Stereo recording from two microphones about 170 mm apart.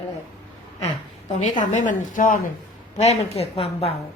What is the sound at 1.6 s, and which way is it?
Speech, 50° left (ahead or behind).